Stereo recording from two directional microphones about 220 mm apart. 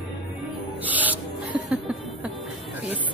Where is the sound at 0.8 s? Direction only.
5° right (ahead or behind).